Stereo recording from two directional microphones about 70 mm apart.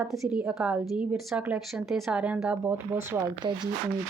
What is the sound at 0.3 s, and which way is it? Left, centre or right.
Speech, centre.